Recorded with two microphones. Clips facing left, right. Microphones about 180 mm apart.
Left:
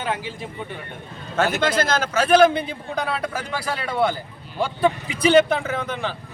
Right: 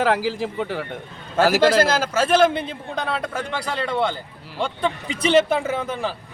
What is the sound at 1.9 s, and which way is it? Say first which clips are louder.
A man's voice: left 1 dB; 5° right (ahead or behind).